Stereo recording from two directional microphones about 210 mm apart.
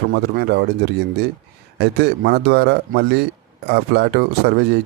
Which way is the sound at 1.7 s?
50° right (ahead or behind).